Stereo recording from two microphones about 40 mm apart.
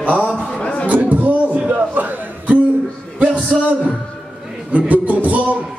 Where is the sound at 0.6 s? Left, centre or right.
Left.